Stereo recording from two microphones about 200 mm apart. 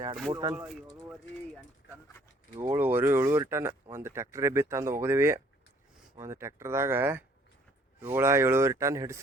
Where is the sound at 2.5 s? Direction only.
10° right (ahead or behind).